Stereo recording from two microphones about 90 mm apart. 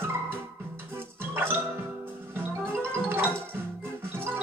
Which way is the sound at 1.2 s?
25° right (ahead or behind).